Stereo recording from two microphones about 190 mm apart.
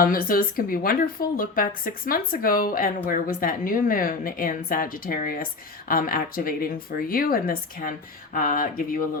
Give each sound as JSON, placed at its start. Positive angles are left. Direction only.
{"t": 0.0, "sound": "speech", "side_deg": 50}